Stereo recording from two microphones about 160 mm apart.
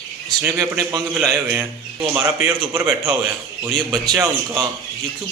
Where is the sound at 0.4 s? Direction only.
15° right (ahead or behind).